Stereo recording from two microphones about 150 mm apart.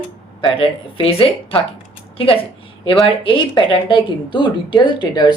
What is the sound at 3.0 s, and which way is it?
A woman's voice, 35° left (ahead or behind).